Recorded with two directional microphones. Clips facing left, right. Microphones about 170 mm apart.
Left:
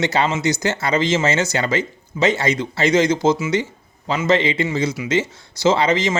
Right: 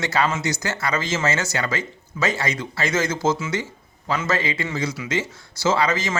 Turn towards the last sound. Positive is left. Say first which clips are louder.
# left 4 dB
turn(degrees=20)  # may be behind; listen again after turning